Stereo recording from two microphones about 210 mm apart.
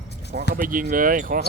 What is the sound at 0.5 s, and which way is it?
Speech, 40° right (ahead or behind).